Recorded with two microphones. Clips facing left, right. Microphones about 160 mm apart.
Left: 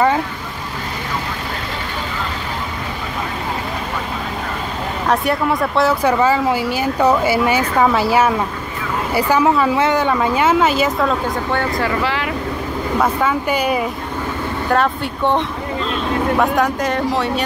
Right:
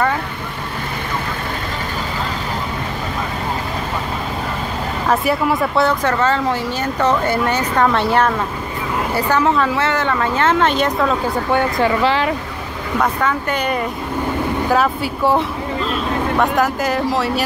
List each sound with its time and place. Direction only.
5.0 s speech: centre (ahead or behind)
6.0 s a woman's voice: 10° left (ahead or behind); by 11.6 s 10° right (ahead or behind)
11.8 s speech: 25° right (ahead or behind)
13.0 s a woman's voice: 10° left (ahead or behind)
14.7 s speech: 5° right (ahead or behind)